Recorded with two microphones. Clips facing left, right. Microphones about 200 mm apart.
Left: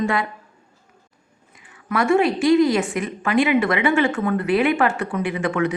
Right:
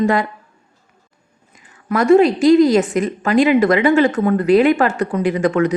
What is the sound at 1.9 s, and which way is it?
Speech, 40° right (ahead or behind).